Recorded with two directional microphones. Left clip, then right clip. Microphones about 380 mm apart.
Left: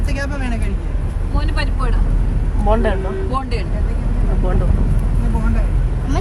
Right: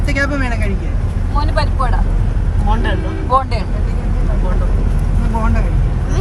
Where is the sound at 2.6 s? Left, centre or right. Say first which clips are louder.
Left 3 dB; centre.